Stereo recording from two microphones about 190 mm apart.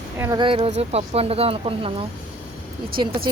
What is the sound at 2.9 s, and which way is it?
Speech, 50° right (ahead or behind).